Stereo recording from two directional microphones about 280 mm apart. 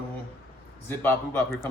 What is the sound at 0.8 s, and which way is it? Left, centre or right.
Speech, centre.